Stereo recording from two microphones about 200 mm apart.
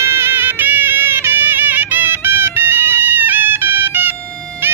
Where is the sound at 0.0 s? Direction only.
10° right (ahead or behind).